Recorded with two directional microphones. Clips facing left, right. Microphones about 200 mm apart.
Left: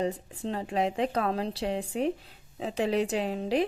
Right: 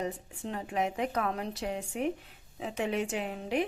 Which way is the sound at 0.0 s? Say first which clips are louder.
Left 5 dB; 30° left (ahead or behind).